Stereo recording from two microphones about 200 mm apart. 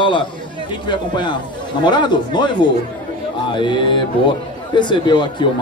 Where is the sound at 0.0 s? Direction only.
25° left (ahead or behind).